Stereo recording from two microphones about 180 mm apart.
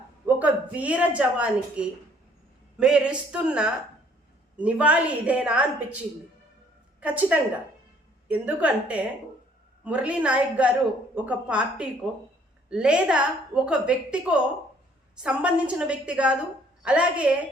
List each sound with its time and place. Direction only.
0.3 s a woman's voice: 10° right (ahead or behind)
7.0 s a woman's voice: 5° right (ahead or behind)